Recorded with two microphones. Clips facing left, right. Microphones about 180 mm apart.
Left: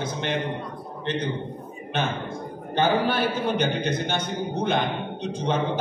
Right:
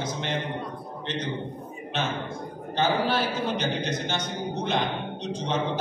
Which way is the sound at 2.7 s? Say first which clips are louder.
Left 2 dB; 55° left (ahead or behind).